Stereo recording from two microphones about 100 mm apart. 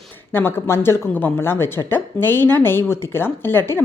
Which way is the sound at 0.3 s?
20° left (ahead or behind).